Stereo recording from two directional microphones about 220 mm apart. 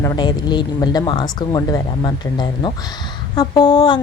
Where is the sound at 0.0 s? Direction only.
15° left (ahead or behind).